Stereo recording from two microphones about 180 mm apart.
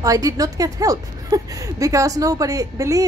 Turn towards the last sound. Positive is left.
turn(degrees=-20)  # may be behind; listen again after turning